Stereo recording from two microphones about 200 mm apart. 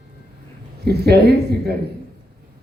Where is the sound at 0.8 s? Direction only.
55° right (ahead or behind).